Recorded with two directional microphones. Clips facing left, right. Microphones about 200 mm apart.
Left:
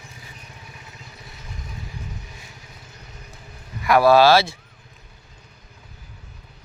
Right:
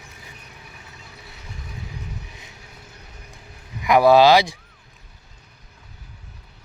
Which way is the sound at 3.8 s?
20° right (ahead or behind).